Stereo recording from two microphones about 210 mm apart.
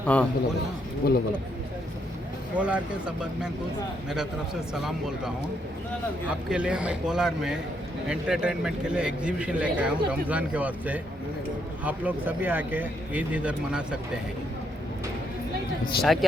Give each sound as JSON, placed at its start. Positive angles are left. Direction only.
{"t": 0.0, "sound": "a man's voice", "side_deg": 5}
{"t": 1.0, "sound": "speech", "side_deg": 45}
{"t": 2.6, "sound": "a man's voice", "side_deg": -5}
{"t": 4.7, "sound": "a man's voice", "side_deg": 0}
{"t": 15.9, "sound": "speech", "side_deg": 50}